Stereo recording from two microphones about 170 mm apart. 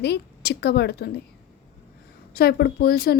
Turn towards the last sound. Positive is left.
turn(degrees=60)  # may be behind; listen again after turning